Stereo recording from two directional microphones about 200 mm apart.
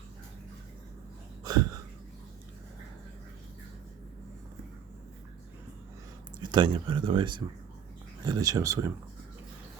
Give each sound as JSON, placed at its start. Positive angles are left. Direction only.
{"t": 1.5, "sound": "wheeze", "side_deg": -20}
{"t": 6.4, "sound": "speech", "side_deg": -20}